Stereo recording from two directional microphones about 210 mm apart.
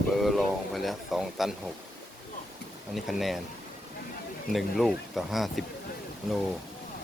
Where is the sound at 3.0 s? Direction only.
Centre (ahead or behind).